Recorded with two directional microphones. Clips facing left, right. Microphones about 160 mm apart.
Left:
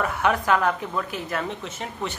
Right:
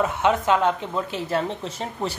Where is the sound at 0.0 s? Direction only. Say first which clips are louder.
Right 2 dB; 20° right (ahead or behind).